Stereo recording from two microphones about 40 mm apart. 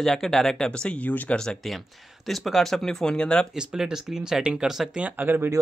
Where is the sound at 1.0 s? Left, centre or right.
Left.